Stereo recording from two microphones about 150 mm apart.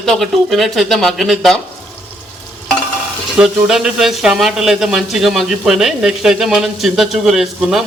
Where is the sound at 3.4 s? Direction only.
5° right (ahead or behind).